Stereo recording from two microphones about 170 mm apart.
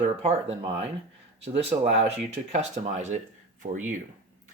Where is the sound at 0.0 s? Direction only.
40° right (ahead or behind).